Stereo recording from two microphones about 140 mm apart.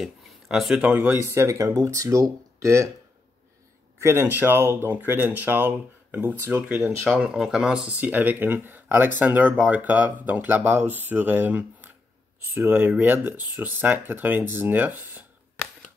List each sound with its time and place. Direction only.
0.0 s speech: 5° right (ahead or behind); by 2.9 s 20° right (ahead or behind)
4.0 s speech: 15° right (ahead or behind)
7.2 s speech: 5° right (ahead or behind)